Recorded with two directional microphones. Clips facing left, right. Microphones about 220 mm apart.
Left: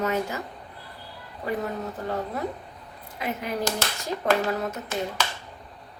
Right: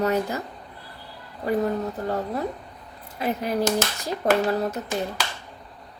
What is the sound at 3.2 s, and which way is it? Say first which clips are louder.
Speech: right 5 dB; 35° right (ahead or behind).